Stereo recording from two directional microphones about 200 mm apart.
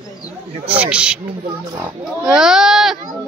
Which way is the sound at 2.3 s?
5° right (ahead or behind).